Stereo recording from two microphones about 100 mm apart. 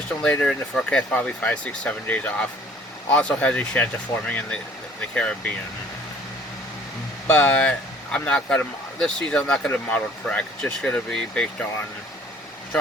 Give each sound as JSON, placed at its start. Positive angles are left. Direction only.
{"t": 0.2, "sound": "speech", "side_deg": 10}
{"t": 4.1, "sound": "speech", "side_deg": 30}
{"t": 4.9, "sound": "speech", "side_deg": 10}
{"t": 7.3, "sound": "speech", "side_deg": 10}